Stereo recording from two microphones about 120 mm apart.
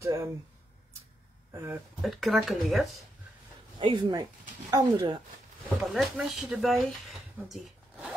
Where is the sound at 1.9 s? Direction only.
Centre (ahead or behind).